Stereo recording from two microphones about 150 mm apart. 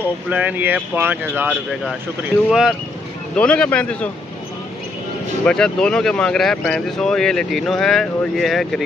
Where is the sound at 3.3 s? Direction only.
5° left (ahead or behind).